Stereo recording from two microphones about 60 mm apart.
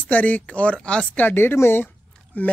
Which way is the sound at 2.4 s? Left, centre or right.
Left.